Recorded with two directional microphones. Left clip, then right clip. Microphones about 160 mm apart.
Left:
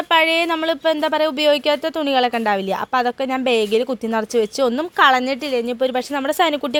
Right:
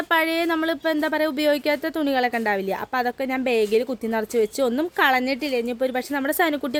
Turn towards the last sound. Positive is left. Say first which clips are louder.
# left 4 dB
turn(degrees=0)  # may be behind; listen again after turning